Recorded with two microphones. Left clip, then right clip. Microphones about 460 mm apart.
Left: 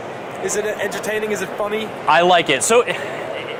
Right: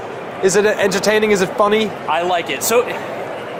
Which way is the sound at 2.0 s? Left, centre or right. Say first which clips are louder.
Left 4 dB; left.